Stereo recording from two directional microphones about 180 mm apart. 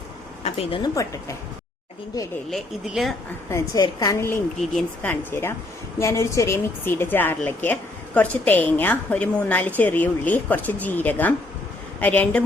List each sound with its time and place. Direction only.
0.4 s a woman's voice: 35° left (ahead or behind)
2.5 s speech: centre (ahead or behind)
3.5 s a woman's voice: 20° left (ahead or behind)